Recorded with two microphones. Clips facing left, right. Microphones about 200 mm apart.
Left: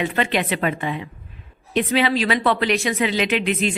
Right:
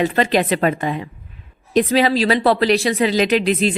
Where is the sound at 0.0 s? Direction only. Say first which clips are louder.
Right 5 dB; 40° right (ahead or behind).